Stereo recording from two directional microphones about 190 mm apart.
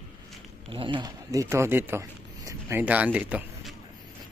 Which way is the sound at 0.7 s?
25° right (ahead or behind).